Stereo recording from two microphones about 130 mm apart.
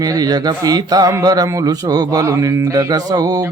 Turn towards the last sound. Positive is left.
turn(degrees=-30)  # may be behind; listen again after turning